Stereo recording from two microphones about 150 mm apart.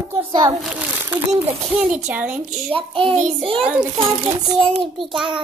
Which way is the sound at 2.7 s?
35° right (ahead or behind).